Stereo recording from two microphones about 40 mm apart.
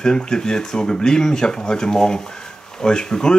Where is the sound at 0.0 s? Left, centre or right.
Centre.